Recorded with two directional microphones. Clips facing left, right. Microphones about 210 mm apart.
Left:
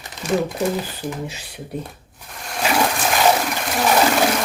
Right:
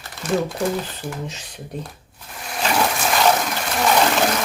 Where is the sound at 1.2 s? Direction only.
10° left (ahead or behind).